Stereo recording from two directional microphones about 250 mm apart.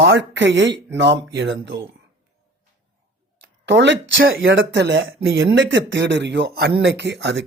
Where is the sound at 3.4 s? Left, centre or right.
Right.